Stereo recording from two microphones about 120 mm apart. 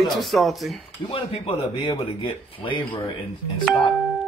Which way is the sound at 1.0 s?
50° left (ahead or behind).